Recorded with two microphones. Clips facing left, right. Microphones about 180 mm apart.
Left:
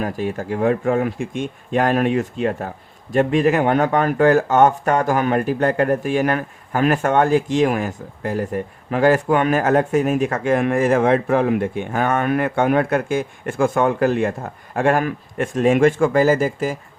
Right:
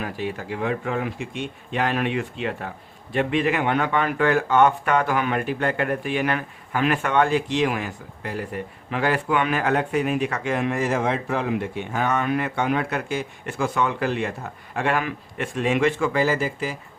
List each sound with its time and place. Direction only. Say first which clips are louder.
0.0 s speech: left 5 dB; 45° left (ahead or behind)